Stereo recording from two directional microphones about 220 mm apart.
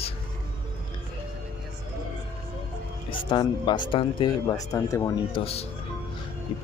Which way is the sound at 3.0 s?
20° left (ahead or behind).